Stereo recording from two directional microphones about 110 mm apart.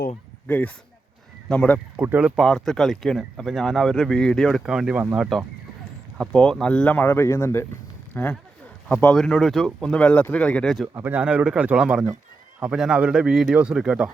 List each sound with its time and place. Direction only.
0.4 s speech: 15° left (ahead or behind)
2.0 s a man's voice: 15° right (ahead or behind)
2.4 s speech: 5° left (ahead or behind)
6.1 s speech: 5° left (ahead or behind)
9.1 s speech: 5° left (ahead or behind)
10.9 s a man's voice: 20° right (ahead or behind)